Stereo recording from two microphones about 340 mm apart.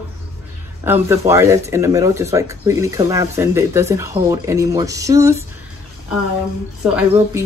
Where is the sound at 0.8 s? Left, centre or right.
Centre.